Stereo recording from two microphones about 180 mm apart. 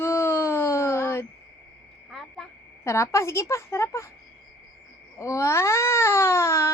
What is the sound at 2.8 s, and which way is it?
Speech, 15° left (ahead or behind).